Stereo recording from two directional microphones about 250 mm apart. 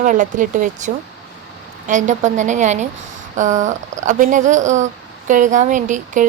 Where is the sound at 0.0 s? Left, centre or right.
Right.